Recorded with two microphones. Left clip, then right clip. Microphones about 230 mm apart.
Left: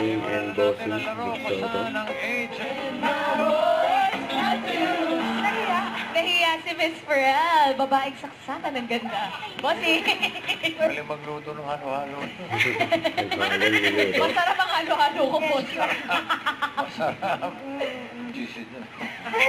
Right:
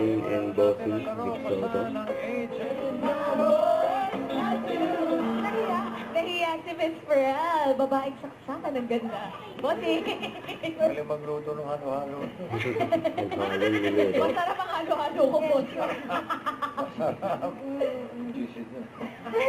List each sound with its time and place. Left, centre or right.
0.1 s music: centre
12.5 s music: centre